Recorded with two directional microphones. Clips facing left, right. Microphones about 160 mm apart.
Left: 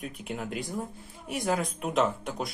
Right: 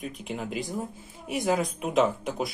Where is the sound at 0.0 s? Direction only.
Centre (ahead or behind).